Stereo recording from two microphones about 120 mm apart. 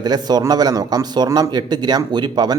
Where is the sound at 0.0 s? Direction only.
35° right (ahead or behind).